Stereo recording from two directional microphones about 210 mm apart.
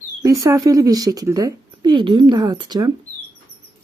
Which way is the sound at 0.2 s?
15° right (ahead or behind).